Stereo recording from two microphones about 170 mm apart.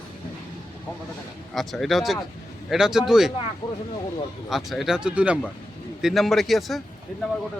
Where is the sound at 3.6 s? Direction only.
25° left (ahead or behind).